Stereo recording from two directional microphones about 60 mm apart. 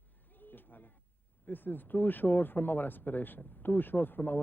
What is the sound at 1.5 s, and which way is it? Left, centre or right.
Speech, left.